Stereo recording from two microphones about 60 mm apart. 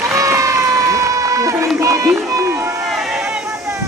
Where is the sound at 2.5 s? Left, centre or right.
Right.